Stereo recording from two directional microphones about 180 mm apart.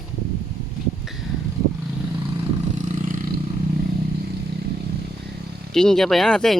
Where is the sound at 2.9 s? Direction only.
45° right (ahead or behind).